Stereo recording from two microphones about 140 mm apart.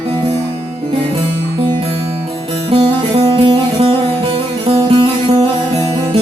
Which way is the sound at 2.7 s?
40° right (ahead or behind).